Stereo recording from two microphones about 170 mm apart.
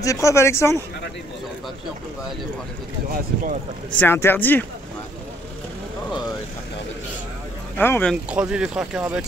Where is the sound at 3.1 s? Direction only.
55° right (ahead or behind).